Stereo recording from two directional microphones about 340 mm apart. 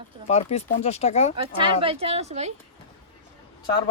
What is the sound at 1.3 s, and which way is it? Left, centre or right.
Speech, centre.